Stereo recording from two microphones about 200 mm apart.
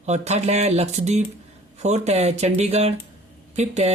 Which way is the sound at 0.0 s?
35° right (ahead or behind).